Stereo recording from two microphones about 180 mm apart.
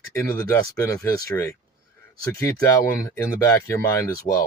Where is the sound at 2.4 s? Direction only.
15° left (ahead or behind).